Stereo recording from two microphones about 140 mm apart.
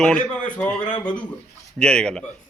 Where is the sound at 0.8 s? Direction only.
35° left (ahead or behind).